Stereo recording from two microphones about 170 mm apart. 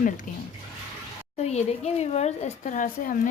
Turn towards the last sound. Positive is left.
turn(degrees=50)  # may be behind; listen again after turning